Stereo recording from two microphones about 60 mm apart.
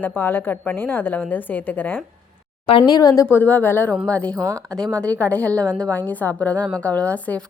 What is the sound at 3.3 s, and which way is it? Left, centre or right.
Speech, left.